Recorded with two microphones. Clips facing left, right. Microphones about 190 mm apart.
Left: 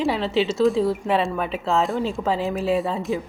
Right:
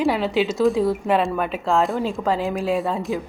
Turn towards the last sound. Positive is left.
turn(degrees=0)  # may be behind; listen again after turning